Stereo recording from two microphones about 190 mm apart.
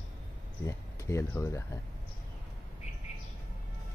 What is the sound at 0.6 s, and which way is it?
Speech, 15° left (ahead or behind).